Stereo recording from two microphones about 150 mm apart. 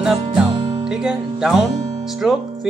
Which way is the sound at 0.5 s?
25° right (ahead or behind).